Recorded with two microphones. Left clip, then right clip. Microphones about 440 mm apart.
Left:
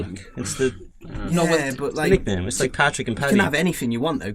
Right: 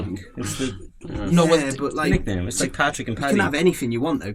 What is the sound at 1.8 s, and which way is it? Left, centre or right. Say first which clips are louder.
Speech: left 3 dB; left.